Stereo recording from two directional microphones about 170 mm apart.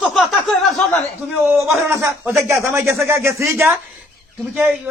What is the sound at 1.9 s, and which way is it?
A man's voice, 15° right (ahead or behind).